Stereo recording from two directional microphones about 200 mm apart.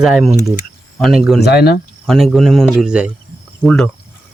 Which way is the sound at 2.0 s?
Centre (ahead or behind).